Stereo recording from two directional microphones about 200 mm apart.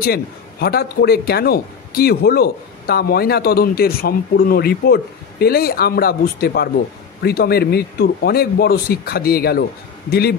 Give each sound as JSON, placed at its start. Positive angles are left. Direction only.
{"t": 0.0, "sound": "a man's voice", "side_deg": 50}